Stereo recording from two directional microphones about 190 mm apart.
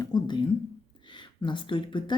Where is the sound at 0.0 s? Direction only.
20° left (ahead or behind).